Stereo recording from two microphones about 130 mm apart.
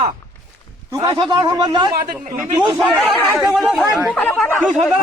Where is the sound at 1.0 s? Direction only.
35° right (ahead or behind).